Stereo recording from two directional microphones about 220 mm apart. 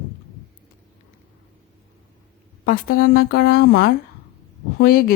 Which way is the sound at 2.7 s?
40° left (ahead or behind).